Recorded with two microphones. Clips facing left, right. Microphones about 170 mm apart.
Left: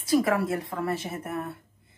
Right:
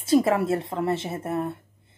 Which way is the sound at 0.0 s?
25° right (ahead or behind).